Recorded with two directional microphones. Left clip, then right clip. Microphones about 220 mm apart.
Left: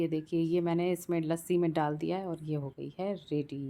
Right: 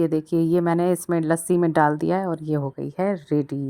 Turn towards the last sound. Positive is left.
turn(degrees=-30)  # may be behind; listen again after turning